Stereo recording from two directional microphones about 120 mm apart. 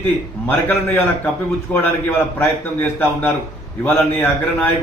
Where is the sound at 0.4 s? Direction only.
20° left (ahead or behind).